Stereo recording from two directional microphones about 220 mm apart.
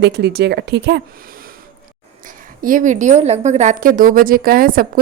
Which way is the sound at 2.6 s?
35° right (ahead or behind).